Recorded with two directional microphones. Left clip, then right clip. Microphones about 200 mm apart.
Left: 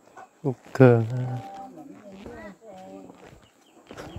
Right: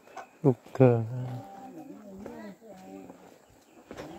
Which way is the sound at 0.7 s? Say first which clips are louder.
Left 8 dB; 20° left (ahead or behind).